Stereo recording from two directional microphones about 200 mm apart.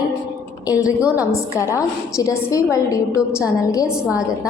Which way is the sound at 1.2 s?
15° left (ahead or behind).